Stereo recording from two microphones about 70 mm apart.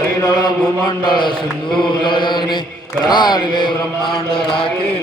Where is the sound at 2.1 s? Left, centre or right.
Left.